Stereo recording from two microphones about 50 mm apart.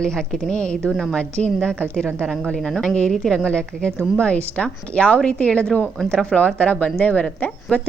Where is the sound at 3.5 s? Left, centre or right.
Left.